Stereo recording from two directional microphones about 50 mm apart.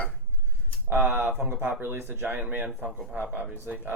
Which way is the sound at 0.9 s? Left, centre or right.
Right.